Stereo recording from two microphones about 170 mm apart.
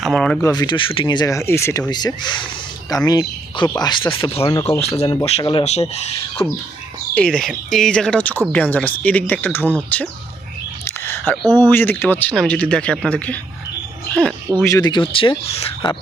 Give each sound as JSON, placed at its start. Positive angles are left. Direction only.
{"t": 0.0, "sound": "speech", "side_deg": 0}
{"t": 0.4, "sound": "speech", "side_deg": 20}
{"t": 4.4, "sound": "speech", "side_deg": 15}
{"t": 4.8, "sound": "speech", "side_deg": 40}
{"t": 5.4, "sound": "speech", "side_deg": 25}
{"t": 5.6, "sound": "speech", "side_deg": 40}
{"t": 7.1, "sound": "speech", "side_deg": 5}
{"t": 10.8, "sound": "whispering", "side_deg": 15}
{"t": 11.6, "sound": "speech", "side_deg": 15}
{"t": 14.7, "sound": "speech", "side_deg": 25}